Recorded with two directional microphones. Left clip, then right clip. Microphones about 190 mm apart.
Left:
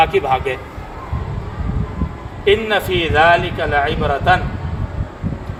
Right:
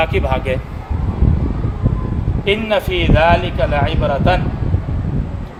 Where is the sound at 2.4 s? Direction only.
20° right (ahead or behind).